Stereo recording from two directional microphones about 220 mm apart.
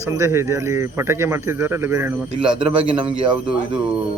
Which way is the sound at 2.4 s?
25° right (ahead or behind).